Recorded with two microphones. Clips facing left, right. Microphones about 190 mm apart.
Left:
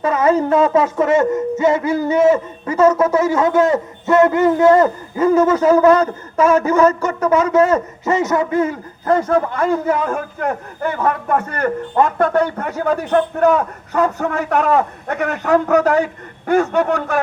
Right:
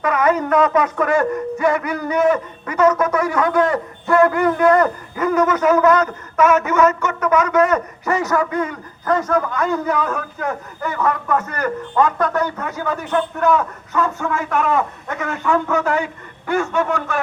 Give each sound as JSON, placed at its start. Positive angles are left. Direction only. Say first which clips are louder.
{"t": 0.0, "sound": "a man's voice", "louder": "left 3 dB", "side_deg": 25}